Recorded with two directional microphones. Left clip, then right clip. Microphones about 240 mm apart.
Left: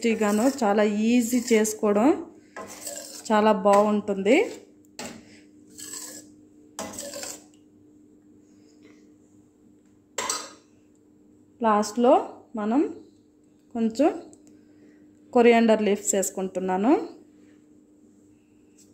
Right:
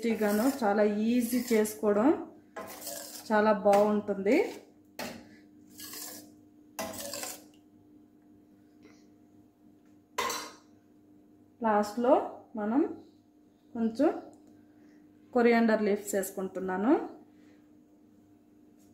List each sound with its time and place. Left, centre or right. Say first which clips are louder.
0.0 s speech: left 6 dB; left
3.3 s speech: left 5 dB; left
11.6 s a woman's voice: left 6 dB; left
15.3 s a woman's voice: left 7 dB; left